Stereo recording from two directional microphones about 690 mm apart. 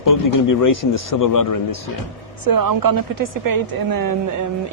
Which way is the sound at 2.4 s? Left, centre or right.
Right.